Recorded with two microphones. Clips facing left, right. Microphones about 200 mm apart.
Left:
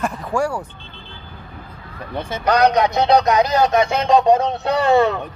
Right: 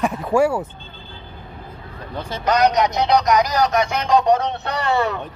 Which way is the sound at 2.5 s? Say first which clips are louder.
Left 2 dB; 30° left (ahead or behind).